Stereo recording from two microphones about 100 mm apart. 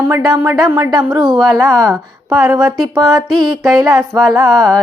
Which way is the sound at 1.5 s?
35° right (ahead or behind).